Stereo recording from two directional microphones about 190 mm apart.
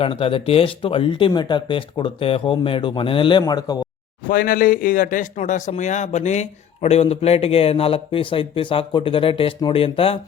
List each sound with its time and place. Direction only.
0.0 s speech: 30° left (ahead or behind)
4.3 s speech: 45° left (ahead or behind); by 10.2 s 30° left (ahead or behind)